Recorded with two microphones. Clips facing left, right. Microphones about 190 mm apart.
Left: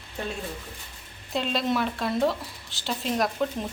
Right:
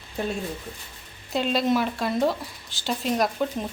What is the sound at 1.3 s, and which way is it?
Speech, centre (ahead or behind).